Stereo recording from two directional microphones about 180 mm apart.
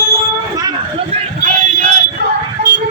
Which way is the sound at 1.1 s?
40° right (ahead or behind).